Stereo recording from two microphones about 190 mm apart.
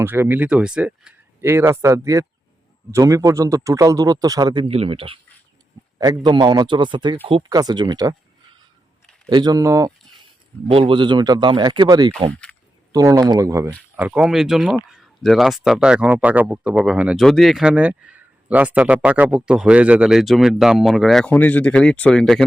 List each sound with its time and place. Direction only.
0.0 s speech: 10° right (ahead or behind)
9.3 s speech: 20° right (ahead or behind)
10.7 s speech: 30° right (ahead or behind)
12.3 s speech: 5° left (ahead or behind)
12.9 s speech: 20° right (ahead or behind); by 22.4 s 5° left (ahead or behind)